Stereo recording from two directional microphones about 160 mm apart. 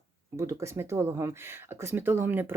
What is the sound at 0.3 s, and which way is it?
Speech, 20° right (ahead or behind).